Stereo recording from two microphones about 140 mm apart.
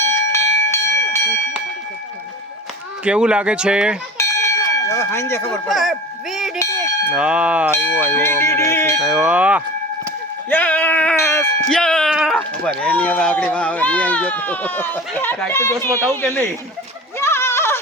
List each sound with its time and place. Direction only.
0.3 s bell: 20° left (ahead or behind)
3.0 s speech: 5° right (ahead or behind)
4.2 s bell: 20° left (ahead or behind)
5.5 s speech: centre (ahead or behind)
6.6 s bell: 20° left (ahead or behind)
7.1 s speech: 10° right (ahead or behind)
8.1 s speech: 15° left (ahead or behind)
9.0 s speech: 5° right (ahead or behind)
10.5 s sheep: 10° left (ahead or behind)
11.7 s a sound: 5° left (ahead or behind)
12.1 s dog: 5° right (ahead or behind)
12.8 s speech: 10° left (ahead or behind)
17.2 s goat: 20° left (ahead or behind)